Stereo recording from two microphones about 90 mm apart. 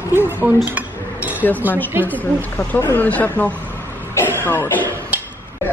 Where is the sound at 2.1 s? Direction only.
20° left (ahead or behind).